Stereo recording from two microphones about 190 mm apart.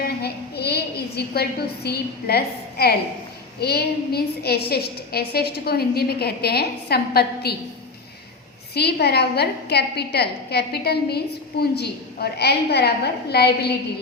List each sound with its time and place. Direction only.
0.0 s a woman's voice: 60° left (ahead or behind)
8.7 s a woman's voice: 60° left (ahead or behind)